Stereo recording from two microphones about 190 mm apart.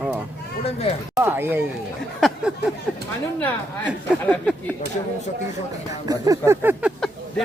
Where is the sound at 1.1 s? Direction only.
10° right (ahead or behind).